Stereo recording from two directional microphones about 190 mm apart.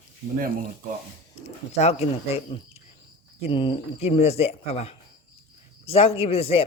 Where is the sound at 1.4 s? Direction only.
35° left (ahead or behind).